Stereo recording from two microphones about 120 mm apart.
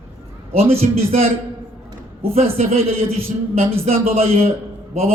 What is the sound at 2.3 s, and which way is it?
A man's voice, 60° right (ahead or behind).